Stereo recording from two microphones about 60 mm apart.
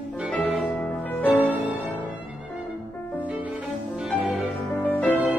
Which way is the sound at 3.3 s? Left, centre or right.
Centre.